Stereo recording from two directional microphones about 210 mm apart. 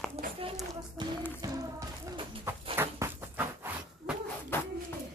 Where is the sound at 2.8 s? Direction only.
10° right (ahead or behind).